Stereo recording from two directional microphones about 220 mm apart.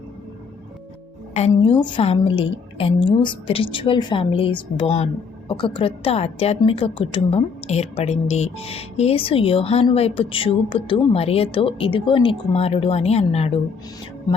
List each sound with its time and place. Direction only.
1.3 s a woman's voice: 30° left (ahead or behind)